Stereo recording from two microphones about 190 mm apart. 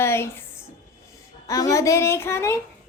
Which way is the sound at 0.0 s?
15° left (ahead or behind).